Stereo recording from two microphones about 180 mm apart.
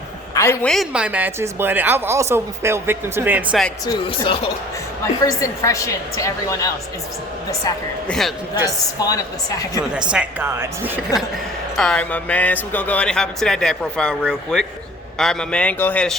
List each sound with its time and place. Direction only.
0.3 s a woman's voice: 15° left (ahead or behind)
0.7 s speech: 5° right (ahead or behind)
3.8 s speech: 30° left (ahead or behind)
5.2 s a woman's voice: 20° left (ahead or behind)
8.0 s speech: 5° left (ahead or behind)
9.0 s speech: 20° left (ahead or behind)
10.1 s speech: 10° right (ahead or behind)
11.8 s a woman's voice: 5° left (ahead or behind)